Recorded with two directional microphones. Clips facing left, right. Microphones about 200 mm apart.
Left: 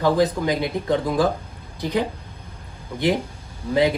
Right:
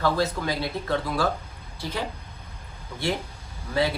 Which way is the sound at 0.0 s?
15° left (ahead or behind).